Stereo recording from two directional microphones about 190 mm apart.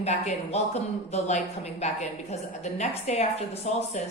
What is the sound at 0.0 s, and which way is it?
Speech, 35° left (ahead or behind).